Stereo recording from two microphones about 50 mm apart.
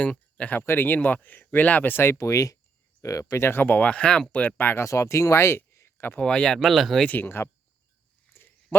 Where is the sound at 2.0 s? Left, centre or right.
Left.